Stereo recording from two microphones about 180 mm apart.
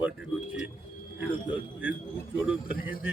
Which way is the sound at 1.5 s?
10° right (ahead or behind).